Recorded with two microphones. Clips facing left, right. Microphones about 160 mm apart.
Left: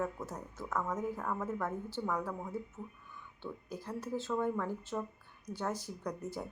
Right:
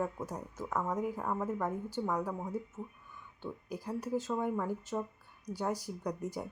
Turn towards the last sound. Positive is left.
turn(degrees=-10)  # may be behind; listen again after turning